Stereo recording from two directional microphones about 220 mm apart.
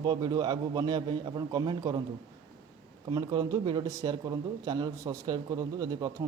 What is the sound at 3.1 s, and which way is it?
Speech, 20° right (ahead or behind).